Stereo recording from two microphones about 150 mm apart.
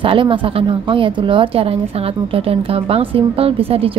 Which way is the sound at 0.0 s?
35° right (ahead or behind).